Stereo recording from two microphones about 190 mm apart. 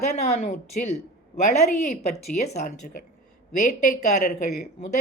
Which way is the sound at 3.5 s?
40° left (ahead or behind).